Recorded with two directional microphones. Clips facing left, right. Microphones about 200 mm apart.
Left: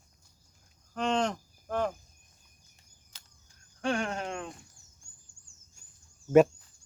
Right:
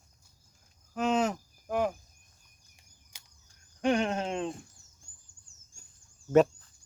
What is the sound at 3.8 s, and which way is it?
Speech, 20° right (ahead or behind).